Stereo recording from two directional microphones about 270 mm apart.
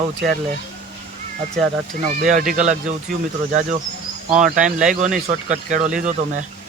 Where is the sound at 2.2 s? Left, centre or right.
Right.